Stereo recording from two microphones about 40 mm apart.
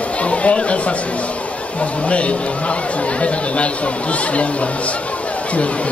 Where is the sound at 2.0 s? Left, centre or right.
Left.